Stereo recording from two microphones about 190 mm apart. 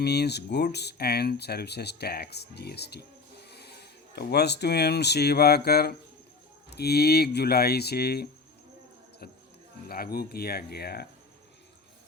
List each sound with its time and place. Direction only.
0.0 s speech: 60° left (ahead or behind)
9.9 s speech: 55° left (ahead or behind)